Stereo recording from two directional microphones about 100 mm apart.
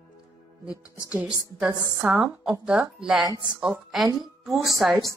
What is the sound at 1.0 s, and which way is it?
A woman's voice, 10° right (ahead or behind).